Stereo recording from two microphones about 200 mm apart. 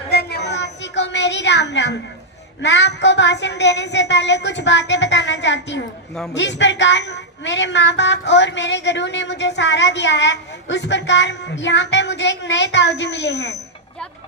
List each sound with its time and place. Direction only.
0.1 s child singing: 55° left (ahead or behind)
2.6 s a woman's voice: 60° left (ahead or behind)